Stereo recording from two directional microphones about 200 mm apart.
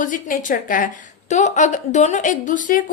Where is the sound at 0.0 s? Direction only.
40° left (ahead or behind).